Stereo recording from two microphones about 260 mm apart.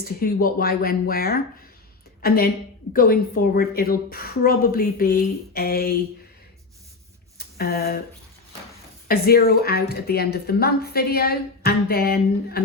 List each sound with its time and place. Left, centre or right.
0.0 s speech: left
7.3 s a sound: left
9.0 s speech: left